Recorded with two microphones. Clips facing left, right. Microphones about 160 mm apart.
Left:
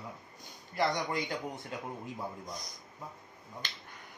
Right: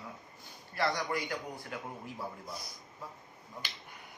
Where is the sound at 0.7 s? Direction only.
20° left (ahead or behind).